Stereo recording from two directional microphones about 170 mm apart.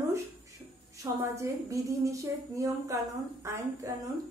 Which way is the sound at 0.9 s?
15° right (ahead or behind).